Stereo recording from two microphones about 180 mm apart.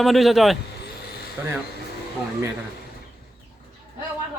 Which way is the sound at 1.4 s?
15° right (ahead or behind).